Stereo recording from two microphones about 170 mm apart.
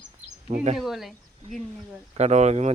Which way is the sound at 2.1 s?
40° right (ahead or behind).